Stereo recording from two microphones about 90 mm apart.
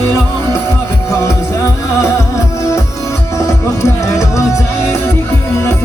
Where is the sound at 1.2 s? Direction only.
35° left (ahead or behind).